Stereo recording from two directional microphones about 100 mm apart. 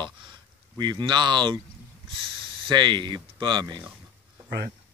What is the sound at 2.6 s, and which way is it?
Speech, 50° right (ahead or behind).